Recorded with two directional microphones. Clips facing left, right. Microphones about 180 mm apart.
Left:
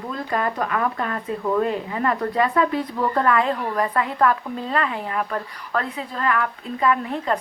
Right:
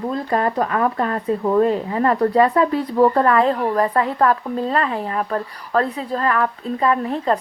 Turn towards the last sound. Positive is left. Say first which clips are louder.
# right 3 dB
turn(degrees=-35)  # may be behind; listen again after turning